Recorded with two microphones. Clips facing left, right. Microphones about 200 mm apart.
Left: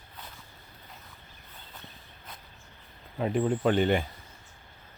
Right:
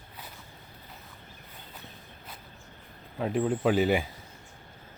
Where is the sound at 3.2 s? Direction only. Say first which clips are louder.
Left 1 dB; centre (ahead or behind).